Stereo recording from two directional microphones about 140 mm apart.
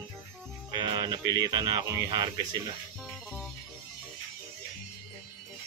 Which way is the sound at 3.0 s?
5° left (ahead or behind).